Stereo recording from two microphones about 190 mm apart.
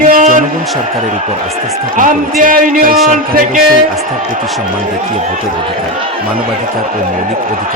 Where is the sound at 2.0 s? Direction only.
45° right (ahead or behind).